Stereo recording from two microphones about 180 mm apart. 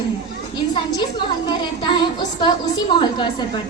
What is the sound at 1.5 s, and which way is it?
A woman's voice, 25° left (ahead or behind).